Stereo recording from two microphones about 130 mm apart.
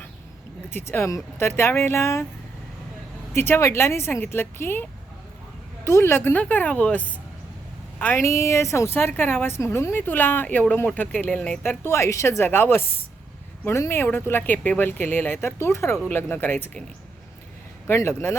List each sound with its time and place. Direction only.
0.7 s speech: 15° left (ahead or behind)
3.3 s a woman's voice: 15° left (ahead or behind)
11.9 s a woman's voice: 20° left (ahead or behind)
17.8 s a woman's voice: 20° left (ahead or behind)